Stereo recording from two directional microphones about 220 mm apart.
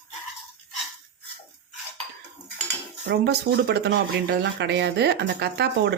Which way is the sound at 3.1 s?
50° right (ahead or behind).